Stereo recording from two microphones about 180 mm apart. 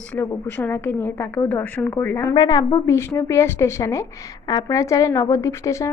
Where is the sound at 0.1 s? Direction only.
10° left (ahead or behind).